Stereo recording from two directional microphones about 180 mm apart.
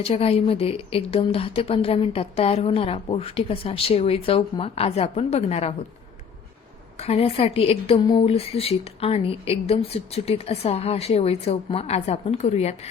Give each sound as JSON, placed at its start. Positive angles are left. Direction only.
{"t": 0.0, "sound": "a woman's voice", "side_deg": 35}
{"t": 7.0, "sound": "a woman's voice", "side_deg": 35}